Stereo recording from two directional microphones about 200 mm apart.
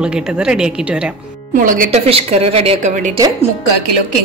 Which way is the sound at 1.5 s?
45° right (ahead or behind).